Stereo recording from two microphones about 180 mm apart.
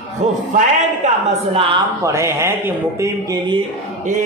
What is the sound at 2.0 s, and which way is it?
Speech, 15° right (ahead or behind).